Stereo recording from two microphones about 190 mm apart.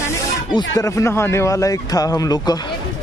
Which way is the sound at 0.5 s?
15° left (ahead or behind).